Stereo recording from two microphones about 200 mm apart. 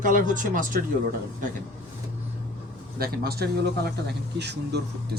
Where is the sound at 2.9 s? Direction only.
50° right (ahead or behind).